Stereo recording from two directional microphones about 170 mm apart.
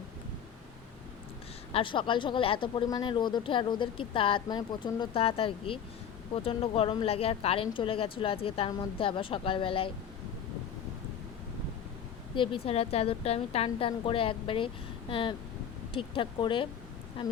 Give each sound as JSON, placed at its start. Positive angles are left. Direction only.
{"t": 1.7, "sound": "a woman's voice", "side_deg": 30}
{"t": 12.3, "sound": "a woman's voice", "side_deg": 30}